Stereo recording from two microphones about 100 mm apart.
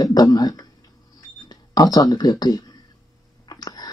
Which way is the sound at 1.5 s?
40° left (ahead or behind).